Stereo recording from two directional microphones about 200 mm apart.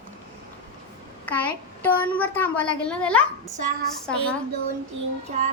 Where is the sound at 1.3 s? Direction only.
10° left (ahead or behind).